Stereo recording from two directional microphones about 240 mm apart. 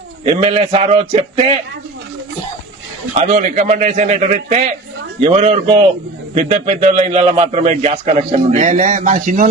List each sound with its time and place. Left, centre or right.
0.3 s a man's voice: right
3.2 s a man's voice: right